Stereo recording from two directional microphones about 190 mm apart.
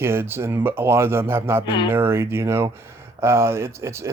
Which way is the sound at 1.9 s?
10° right (ahead or behind).